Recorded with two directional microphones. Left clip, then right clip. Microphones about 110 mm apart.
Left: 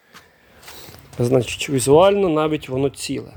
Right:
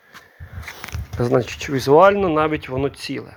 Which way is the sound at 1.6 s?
30° left (ahead or behind).